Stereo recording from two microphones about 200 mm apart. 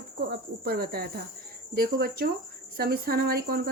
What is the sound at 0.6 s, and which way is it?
Speech, 50° right (ahead or behind).